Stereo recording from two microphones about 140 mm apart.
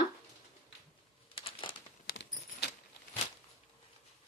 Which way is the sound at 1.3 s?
40° left (ahead or behind).